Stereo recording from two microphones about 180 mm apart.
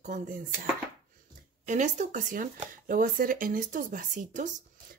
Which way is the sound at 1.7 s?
45° right (ahead or behind).